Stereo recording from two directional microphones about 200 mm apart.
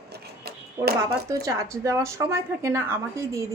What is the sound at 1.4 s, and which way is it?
A woman's voice, 15° right (ahead or behind).